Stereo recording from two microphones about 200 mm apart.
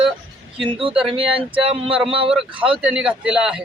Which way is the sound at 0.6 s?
25° right (ahead or behind).